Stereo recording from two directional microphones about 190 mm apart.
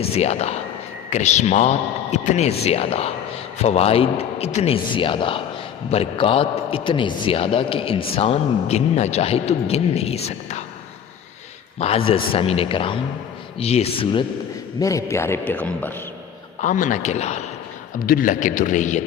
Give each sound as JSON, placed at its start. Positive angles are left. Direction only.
{"t": 0.0, "sound": "a man's voice", "side_deg": 35}
{"t": 11.8, "sound": "a man's voice", "side_deg": 30}
{"t": 14.8, "sound": "a man's voice", "side_deg": 15}
{"t": 16.6, "sound": "a man's voice", "side_deg": 40}
{"t": 18.0, "sound": "a man's voice", "side_deg": 50}